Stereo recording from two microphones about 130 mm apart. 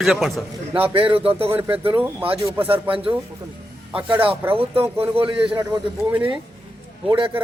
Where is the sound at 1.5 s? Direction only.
20° right (ahead or behind).